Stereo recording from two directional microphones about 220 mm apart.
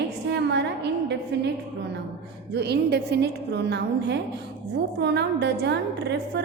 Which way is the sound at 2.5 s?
50° right (ahead or behind).